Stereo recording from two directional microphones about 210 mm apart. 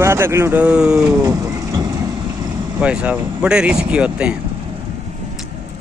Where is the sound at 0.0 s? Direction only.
10° right (ahead or behind).